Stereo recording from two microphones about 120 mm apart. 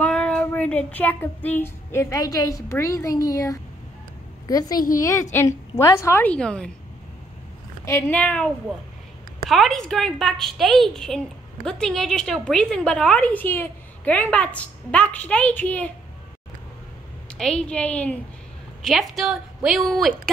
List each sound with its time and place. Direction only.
0.0 s child singing: 10° left (ahead or behind); by 3.5 s 30° left (ahead or behind)
4.5 s a woman's voice: 30° left (ahead or behind); by 6.7 s 10° left (ahead or behind)
7.8 s a woman's voice: 20° left (ahead or behind)
8.2 s a woman's voice: 10° left (ahead or behind)
9.5 s a woman's voice: centre (ahead or behind)
17.4 s a woman's voice: 5° left (ahead or behind)
18.8 s a woman's voice: centre (ahead or behind)